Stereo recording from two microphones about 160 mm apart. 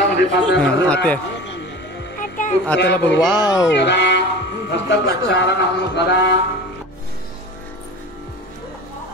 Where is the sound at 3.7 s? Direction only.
90° left.